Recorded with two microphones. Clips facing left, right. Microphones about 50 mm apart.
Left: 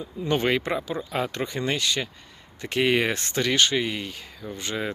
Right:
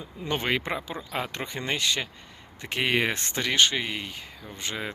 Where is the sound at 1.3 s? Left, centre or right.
Centre.